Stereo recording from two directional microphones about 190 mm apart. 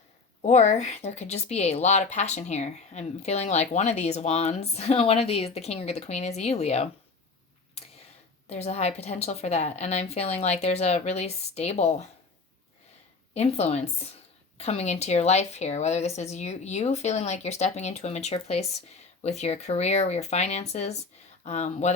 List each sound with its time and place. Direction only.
0.4 s speech: 35° left (ahead or behind)
8.4 s speech: 35° left (ahead or behind)
13.3 s speech: 35° left (ahead or behind)